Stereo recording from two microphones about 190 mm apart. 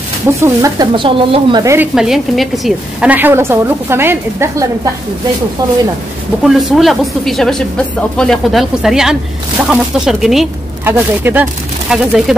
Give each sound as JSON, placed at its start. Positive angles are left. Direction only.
{"t": 0.4, "sound": "speech", "side_deg": -20}
{"t": 2.0, "sound": "a woman's voice", "side_deg": 0}
{"t": 6.4, "sound": "a woman's voice", "side_deg": 0}